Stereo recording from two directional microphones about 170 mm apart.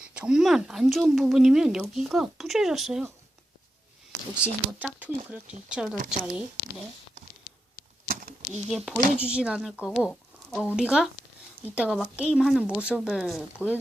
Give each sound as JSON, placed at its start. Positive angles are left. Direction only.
{"t": 0.1, "sound": "speech", "side_deg": -5}
{"t": 4.4, "sound": "speech", "side_deg": -10}
{"t": 8.0, "sound": "a sound", "side_deg": -55}
{"t": 8.7, "sound": "speech", "side_deg": 0}